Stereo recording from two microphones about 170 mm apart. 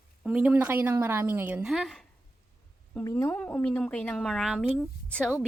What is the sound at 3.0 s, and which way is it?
A woman's voice, 15° left (ahead or behind).